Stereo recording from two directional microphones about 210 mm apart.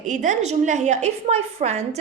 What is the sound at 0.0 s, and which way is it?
A woman's voice, 35° right (ahead or behind).